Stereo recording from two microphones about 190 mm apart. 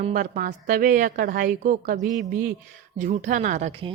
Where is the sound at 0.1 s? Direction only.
45° right (ahead or behind).